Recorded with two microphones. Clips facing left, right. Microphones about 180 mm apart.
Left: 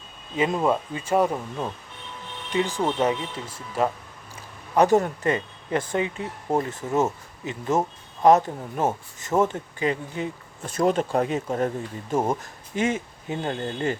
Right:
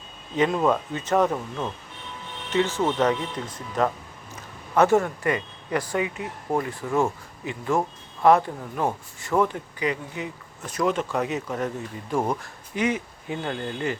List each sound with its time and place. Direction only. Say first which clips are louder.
0.3 s speech: right 1 dB; 10° left (ahead or behind); by 13.9 s 25° left (ahead or behind)